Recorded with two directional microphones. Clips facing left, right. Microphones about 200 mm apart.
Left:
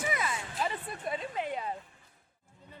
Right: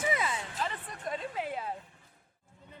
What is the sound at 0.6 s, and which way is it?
Speech, 10° left (ahead or behind).